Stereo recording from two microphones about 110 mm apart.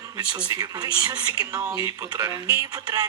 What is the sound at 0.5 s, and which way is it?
A woman's voice, 40° right (ahead or behind).